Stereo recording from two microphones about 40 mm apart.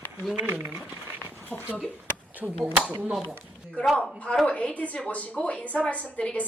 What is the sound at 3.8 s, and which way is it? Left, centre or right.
A woman's voice, left.